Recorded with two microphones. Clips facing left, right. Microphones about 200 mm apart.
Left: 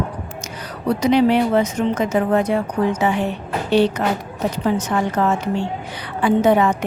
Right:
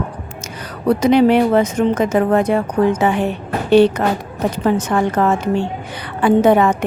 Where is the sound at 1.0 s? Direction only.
55° right (ahead or behind).